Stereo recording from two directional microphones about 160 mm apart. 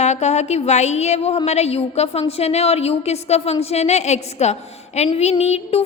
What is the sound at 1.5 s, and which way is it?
A woman's voice, 40° left (ahead or behind).